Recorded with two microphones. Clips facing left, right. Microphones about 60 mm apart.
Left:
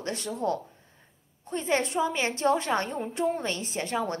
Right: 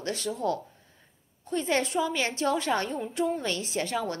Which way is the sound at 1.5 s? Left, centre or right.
Left.